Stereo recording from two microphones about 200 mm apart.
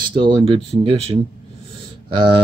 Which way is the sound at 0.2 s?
25° right (ahead or behind).